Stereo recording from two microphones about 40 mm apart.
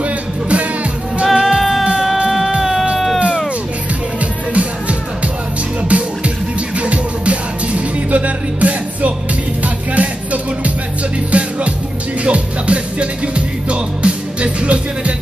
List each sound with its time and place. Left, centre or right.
0.0 s music: right
1.2 s music: centre
4.2 s music: right